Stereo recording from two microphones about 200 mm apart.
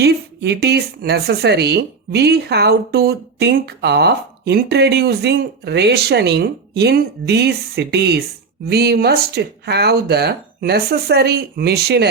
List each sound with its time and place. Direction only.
0.0 s speech: 55° right (ahead or behind)